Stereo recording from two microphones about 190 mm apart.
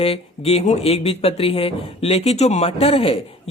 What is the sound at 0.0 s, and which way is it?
Speech, 30° left (ahead or behind).